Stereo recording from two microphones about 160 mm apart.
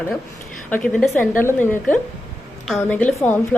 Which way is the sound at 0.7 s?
10° left (ahead or behind).